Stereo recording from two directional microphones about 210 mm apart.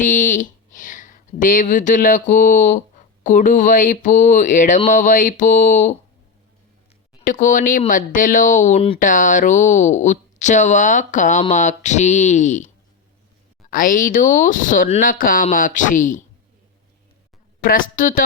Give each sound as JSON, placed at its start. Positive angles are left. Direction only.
{"t": 0.0, "sound": "speech", "side_deg": 35}
{"t": 7.3, "sound": "speech", "side_deg": 40}
{"t": 17.6, "sound": "speech", "side_deg": 40}